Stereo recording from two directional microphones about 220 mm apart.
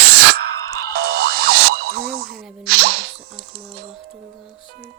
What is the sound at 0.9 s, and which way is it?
Music, 45° right (ahead or behind).